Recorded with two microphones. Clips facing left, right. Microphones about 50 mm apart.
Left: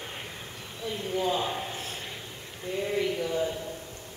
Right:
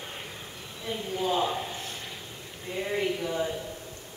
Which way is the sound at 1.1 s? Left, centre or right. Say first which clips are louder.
Left 1 dB; centre.